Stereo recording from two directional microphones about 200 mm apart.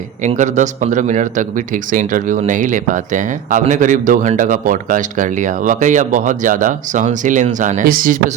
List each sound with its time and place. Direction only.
0.2 s a man's voice: 40° right (ahead or behind)